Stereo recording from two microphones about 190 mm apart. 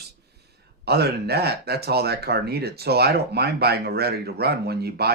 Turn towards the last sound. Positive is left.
turn(degrees=-55)  # may be behind; listen again after turning